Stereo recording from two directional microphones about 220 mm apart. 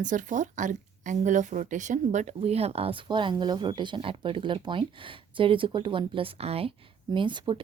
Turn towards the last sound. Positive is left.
turn(degrees=-20)  # may be behind; listen again after turning